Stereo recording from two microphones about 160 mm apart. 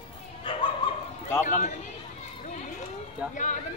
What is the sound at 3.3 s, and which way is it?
Speech, 50° left (ahead or behind).